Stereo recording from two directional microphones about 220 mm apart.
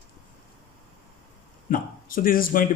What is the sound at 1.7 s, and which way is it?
Speech, 40° left (ahead or behind).